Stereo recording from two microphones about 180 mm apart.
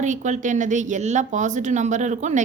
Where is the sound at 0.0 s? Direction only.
45° right (ahead or behind).